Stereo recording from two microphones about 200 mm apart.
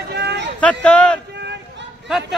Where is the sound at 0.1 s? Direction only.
55° right (ahead or behind).